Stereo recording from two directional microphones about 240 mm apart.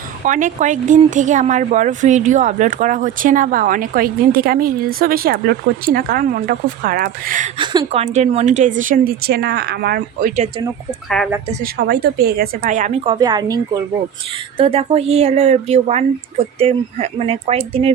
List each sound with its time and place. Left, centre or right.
0.3 s speech: right
7.6 s speech: centre
11.2 s speech: centre
11.6 s speech: right
13.1 s speech: centre
14.6 s speech: right